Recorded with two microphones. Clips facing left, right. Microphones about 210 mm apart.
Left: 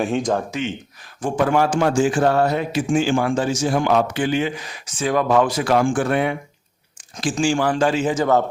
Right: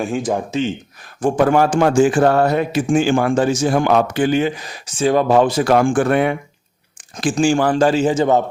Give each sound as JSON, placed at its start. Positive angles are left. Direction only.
{"t": 0.0, "sound": "speech", "side_deg": -5}
{"t": 1.2, "sound": "speech", "side_deg": -45}
{"t": 5.6, "sound": "speech", "side_deg": -50}
{"t": 7.3, "sound": "a man's voice", "side_deg": -45}